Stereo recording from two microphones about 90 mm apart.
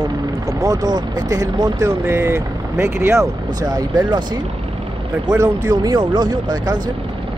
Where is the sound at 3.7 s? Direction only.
50° right (ahead or behind).